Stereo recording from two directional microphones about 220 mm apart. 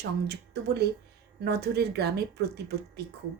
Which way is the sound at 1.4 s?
50° right (ahead or behind).